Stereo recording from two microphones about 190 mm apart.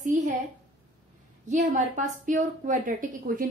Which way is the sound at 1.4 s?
40° right (ahead or behind).